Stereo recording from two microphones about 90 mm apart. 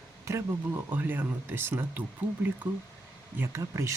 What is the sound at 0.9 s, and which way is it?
Speech, 20° right (ahead or behind).